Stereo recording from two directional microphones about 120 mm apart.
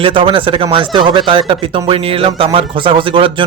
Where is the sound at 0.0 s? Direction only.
45° right (ahead or behind).